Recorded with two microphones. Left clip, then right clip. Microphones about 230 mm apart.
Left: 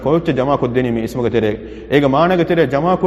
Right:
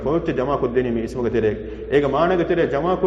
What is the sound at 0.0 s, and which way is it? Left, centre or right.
A man's voice, left.